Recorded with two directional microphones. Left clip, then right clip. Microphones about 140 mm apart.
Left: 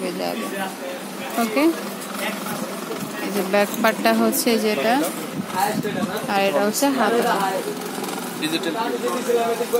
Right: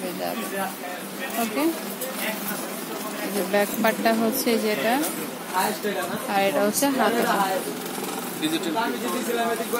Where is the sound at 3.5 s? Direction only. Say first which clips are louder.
Left 3 dB; 30° left (ahead or behind).